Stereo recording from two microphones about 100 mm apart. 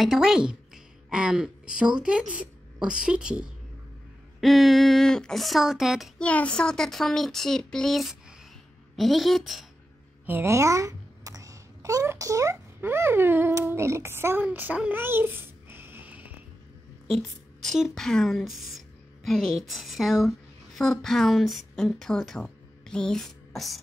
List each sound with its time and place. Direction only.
0.0 s a woman's voice: 5° right (ahead or behind)
6.1 s a child's voice: 15° left (ahead or behind)
10.2 s a sound: 25° right (ahead or behind)
12.8 s a child's voice: 25° right (ahead or behind)
17.1 s a woman's voice: 5° left (ahead or behind)
22.8 s a sound: 5° left (ahead or behind)